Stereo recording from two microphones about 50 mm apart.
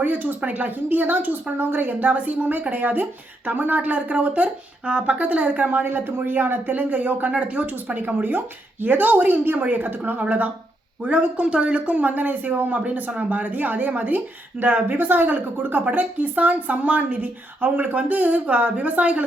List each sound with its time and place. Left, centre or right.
0.0 s a woman's voice: right